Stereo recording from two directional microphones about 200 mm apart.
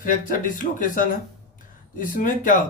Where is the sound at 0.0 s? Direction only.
40° left (ahead or behind).